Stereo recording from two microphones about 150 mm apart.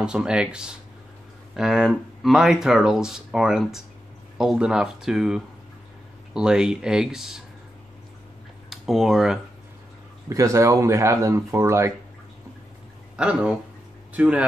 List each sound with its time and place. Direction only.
0.0 s speech: 5° right (ahead or behind)
8.6 s speech: centre (ahead or behind)
10.3 s speech: 20° right (ahead or behind)
13.1 s speech: 5° right (ahead or behind)